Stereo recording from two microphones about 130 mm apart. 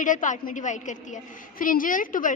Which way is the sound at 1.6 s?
90° left.